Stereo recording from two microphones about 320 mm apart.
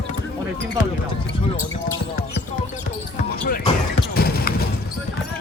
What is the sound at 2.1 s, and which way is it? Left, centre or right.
Basketball bounce, left.